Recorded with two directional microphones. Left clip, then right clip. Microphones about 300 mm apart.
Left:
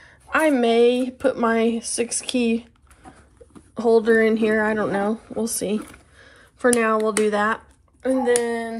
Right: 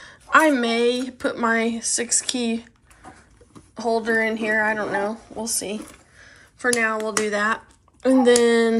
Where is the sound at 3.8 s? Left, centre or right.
Centre.